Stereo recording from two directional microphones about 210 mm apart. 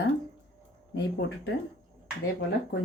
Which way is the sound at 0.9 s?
50° left (ahead or behind).